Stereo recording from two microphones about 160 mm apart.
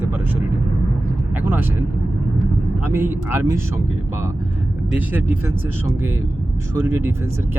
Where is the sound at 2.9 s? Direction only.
15° right (ahead or behind).